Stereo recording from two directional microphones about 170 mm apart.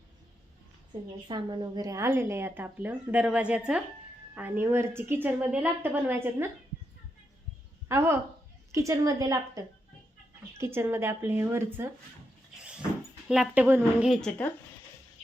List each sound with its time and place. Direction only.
1.3 s a woman's voice: 25° right (ahead or behind)
7.9 s a woman's voice: 15° right (ahead or behind)
10.6 s a woman's voice: 15° right (ahead or behind)
13.2 s a woman's voice: 5° right (ahead or behind)
14.1 s speech: 5° left (ahead or behind)